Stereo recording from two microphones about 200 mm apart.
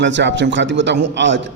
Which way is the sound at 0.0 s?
65° right (ahead or behind).